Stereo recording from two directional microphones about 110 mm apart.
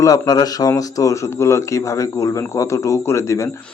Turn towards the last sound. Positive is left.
turn(degrees=25)  # may be behind; listen again after turning